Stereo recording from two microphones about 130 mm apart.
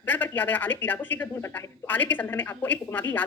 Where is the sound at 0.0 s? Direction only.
15° left (ahead or behind).